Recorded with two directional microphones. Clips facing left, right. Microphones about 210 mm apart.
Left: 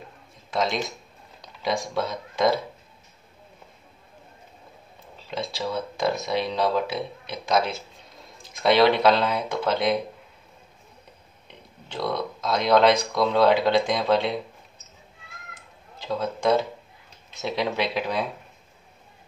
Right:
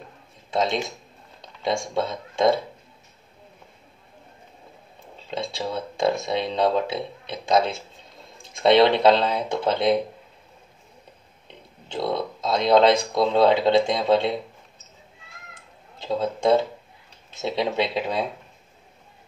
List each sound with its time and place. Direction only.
0.5 s speech: 25° right (ahead or behind)
5.6 s speech: 25° right (ahead or behind)
11.9 s speech: 25° right (ahead or behind)
16.0 s speech: 25° right (ahead or behind)